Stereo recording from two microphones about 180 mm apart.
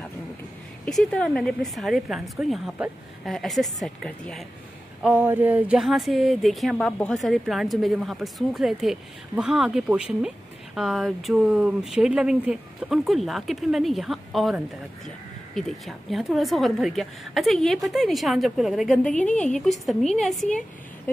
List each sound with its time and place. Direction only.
0.8 s speech: 5° left (ahead or behind)
5.0 s speech: 10° right (ahead or behind)